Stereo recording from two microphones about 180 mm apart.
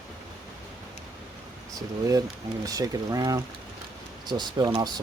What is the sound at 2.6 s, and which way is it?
Speech, 20° right (ahead or behind).